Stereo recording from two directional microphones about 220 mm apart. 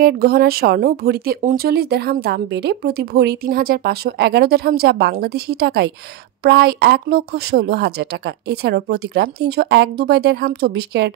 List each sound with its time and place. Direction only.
0.0 s speech: 45° right (ahead or behind)